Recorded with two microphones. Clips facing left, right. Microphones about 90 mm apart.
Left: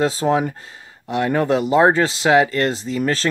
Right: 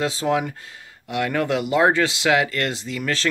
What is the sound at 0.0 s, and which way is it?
Speech, 35° left (ahead or behind).